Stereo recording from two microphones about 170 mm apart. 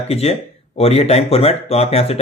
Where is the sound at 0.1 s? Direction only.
35° left (ahead or behind).